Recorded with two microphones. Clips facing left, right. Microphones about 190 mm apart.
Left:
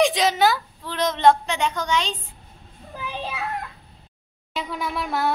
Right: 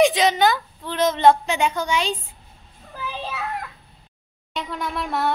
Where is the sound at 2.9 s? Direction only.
15° left (ahead or behind).